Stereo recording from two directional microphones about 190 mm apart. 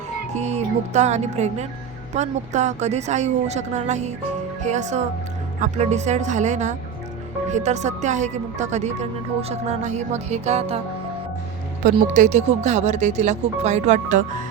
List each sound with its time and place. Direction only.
0.3 s speech: 35° right (ahead or behind)
12.1 s speech: 40° right (ahead or behind)